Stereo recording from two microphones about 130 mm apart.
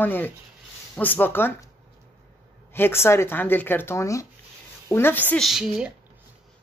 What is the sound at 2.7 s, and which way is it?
Speech, 20° left (ahead or behind).